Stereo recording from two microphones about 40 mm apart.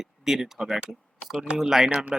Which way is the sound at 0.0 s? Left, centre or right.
Centre.